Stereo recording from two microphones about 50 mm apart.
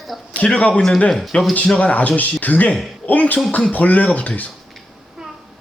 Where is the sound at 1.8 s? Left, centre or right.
Left.